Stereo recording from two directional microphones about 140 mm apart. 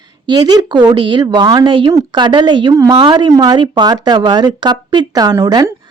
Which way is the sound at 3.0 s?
35° right (ahead or behind).